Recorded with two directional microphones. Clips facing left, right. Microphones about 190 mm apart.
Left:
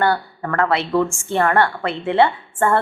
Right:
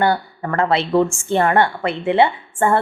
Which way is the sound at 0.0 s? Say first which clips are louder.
Right 1 dB; 20° right (ahead or behind).